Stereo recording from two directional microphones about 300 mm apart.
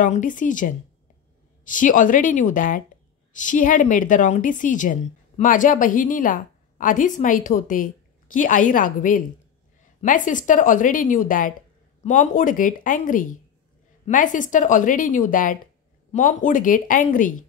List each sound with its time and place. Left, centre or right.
0.0 s a woman's voice: left